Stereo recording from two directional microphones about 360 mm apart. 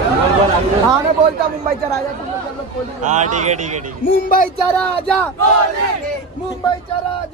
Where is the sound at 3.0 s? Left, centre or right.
Centre.